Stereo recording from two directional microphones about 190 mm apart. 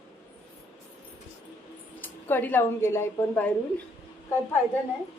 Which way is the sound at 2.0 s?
10° left (ahead or behind).